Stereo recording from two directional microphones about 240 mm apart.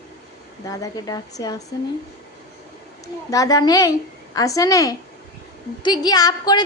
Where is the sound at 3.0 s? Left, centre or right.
Centre.